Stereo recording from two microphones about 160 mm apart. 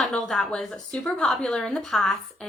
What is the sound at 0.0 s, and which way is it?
A woman's voice, 5° left (ahead or behind).